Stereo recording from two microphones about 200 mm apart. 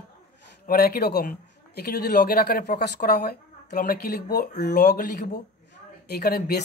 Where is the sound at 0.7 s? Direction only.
50° left (ahead or behind).